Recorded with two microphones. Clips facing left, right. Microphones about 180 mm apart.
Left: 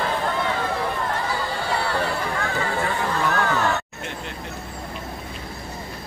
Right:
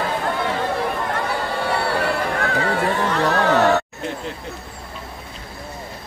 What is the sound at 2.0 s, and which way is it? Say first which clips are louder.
Honk: right 3 dB; 70° right (ahead or behind).